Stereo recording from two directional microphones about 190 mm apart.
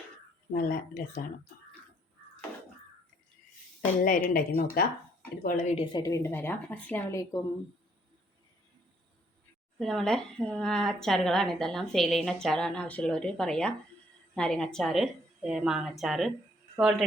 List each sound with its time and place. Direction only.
0.5 s speech: 50° left (ahead or behind)
4.0 s speech: 45° left (ahead or behind)
5.7 s a woman's voice: 25° left (ahead or behind)
9.7 s speech: centre (ahead or behind)